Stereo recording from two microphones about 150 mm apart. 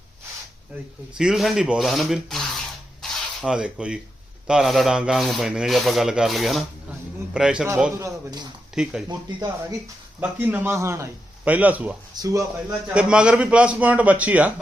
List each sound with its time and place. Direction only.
1.1 s rub: 5° right (ahead or behind)
3.0 s a sound: 5° right (ahead or behind)
4.4 s rub: 5° right (ahead or behind)
7.9 s speech: 25° right (ahead or behind)
8.7 s speech: 5° right (ahead or behind)
9.0 s speech: 25° right (ahead or behind)
10.2 s a man's voice: 15° right (ahead or behind)
12.1 s speech: 20° right (ahead or behind)
12.9 s a man's voice: 5° right (ahead or behind)